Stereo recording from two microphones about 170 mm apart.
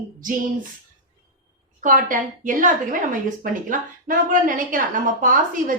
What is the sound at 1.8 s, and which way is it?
A woman's voice, 50° right (ahead or behind).